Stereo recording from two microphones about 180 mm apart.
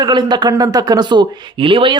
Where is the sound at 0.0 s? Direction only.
25° right (ahead or behind).